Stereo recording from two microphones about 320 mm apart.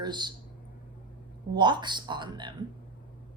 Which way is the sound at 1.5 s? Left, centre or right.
Centre.